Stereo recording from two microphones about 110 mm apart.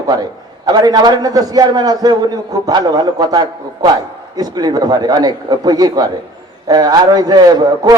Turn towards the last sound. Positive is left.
turn(degrees=-40)  # may be behind; listen again after turning